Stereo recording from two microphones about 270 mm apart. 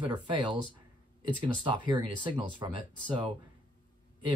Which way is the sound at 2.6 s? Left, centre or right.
Centre.